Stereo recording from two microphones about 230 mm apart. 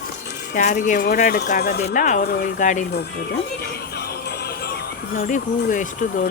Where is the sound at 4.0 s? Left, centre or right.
Left.